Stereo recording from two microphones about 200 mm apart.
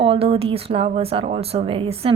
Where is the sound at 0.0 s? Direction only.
30° right (ahead or behind).